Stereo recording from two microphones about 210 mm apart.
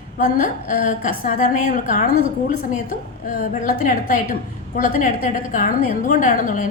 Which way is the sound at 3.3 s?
40° left (ahead or behind).